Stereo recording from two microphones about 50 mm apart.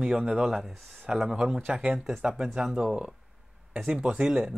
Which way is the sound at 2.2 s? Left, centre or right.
Centre.